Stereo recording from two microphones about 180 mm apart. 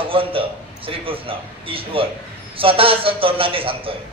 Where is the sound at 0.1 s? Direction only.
30° right (ahead or behind).